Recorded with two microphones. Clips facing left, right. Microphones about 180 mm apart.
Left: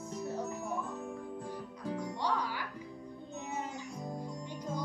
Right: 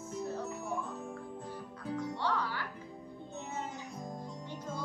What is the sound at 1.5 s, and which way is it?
Music, 15° left (ahead or behind).